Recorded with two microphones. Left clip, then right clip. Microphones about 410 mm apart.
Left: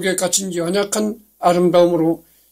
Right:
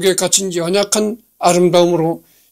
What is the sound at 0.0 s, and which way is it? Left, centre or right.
Speech, right.